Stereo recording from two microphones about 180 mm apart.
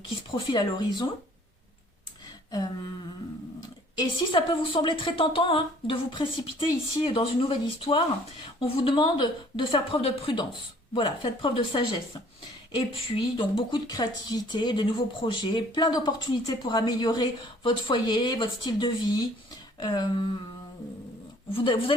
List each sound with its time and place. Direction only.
0.5 s speech: 25° left (ahead or behind)
2.5 s speech: 20° left (ahead or behind)
3.9 s speech: 25° left (ahead or behind)
12.9 s speech: 30° left (ahead or behind)
21.5 s speech: 30° left (ahead or behind)